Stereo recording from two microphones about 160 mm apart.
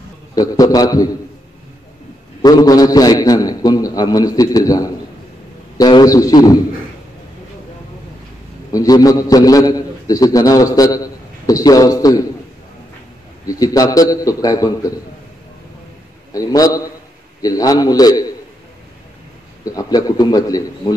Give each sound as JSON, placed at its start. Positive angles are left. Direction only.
{"t": 0.3, "sound": "a man's voice", "side_deg": 25}
{"t": 2.4, "sound": "a man's voice", "side_deg": 25}
{"t": 8.7, "sound": "a man's voice", "side_deg": 20}
{"t": 13.5, "sound": "a man's voice", "side_deg": 25}
{"t": 16.3, "sound": "a man's voice", "side_deg": 20}
{"t": 19.6, "sound": "a man's voice", "side_deg": 20}